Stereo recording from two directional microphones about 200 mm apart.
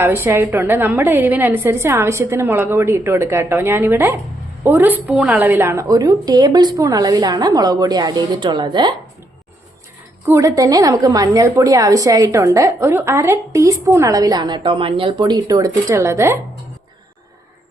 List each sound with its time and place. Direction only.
0.0 s a woman's voice: 10° right (ahead or behind)
10.2 s a woman's voice: 15° right (ahead or behind)